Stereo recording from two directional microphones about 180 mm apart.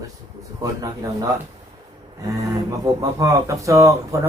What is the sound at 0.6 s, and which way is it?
Speech, 20° right (ahead or behind).